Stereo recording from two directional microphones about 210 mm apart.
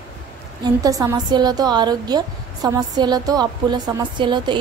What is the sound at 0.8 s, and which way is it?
Speech, 15° right (ahead or behind).